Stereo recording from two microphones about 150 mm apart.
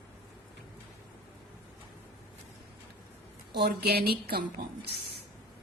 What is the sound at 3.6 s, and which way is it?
A woman's voice, 90° right.